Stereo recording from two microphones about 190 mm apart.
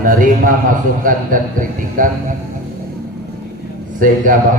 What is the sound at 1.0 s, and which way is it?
A man's voice, 45° right (ahead or behind).